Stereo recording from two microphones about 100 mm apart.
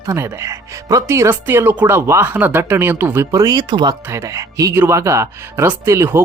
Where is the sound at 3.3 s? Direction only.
40° right (ahead or behind).